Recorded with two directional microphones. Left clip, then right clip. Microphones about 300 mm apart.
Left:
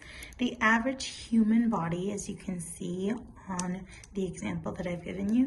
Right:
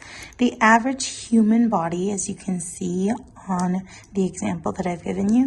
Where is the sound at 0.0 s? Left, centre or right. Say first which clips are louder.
Right 11 dB; centre.